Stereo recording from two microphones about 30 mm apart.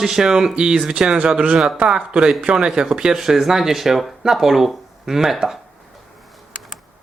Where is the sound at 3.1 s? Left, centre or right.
Centre.